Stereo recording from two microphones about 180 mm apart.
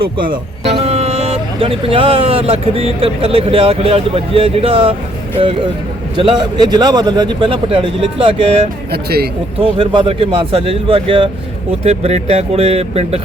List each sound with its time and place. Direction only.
0.0 s a man's voice: 25° right (ahead or behind)
6.1 s a man's voice: 25° right (ahead or behind)
8.9 s speech: 60° right (ahead or behind)
9.6 s speech: 30° right (ahead or behind)